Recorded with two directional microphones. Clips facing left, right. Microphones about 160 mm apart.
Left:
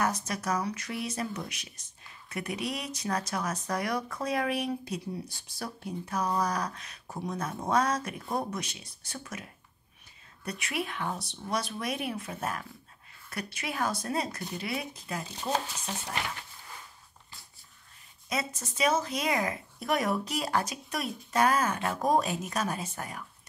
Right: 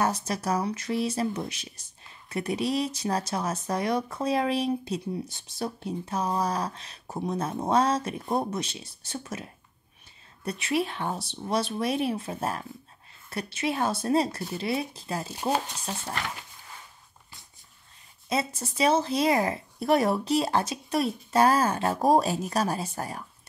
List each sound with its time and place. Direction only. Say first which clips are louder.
0.0 s speech: right 3 dB; 30° right (ahead or behind)
18.3 s speech: right 5 dB; 30° right (ahead or behind)